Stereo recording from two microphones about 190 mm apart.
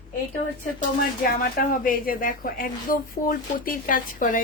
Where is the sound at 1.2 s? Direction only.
50° left (ahead or behind).